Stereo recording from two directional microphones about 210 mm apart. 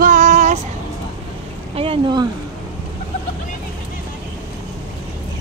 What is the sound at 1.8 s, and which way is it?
Speech, 25° right (ahead or behind).